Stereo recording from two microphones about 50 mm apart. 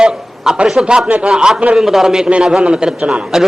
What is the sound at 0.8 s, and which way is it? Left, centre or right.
A man's voice, right.